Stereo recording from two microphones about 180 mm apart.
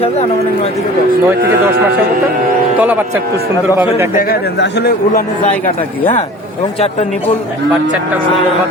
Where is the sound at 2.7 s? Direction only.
10° right (ahead or behind).